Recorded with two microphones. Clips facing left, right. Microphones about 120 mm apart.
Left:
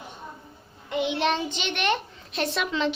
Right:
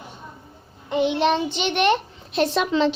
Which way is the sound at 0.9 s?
30° right (ahead or behind).